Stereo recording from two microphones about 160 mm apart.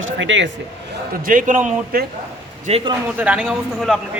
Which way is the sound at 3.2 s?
5° right (ahead or behind).